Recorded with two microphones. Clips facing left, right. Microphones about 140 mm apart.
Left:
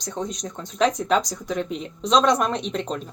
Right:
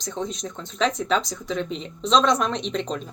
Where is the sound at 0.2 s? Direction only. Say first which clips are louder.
Even; 40° left (ahead or behind).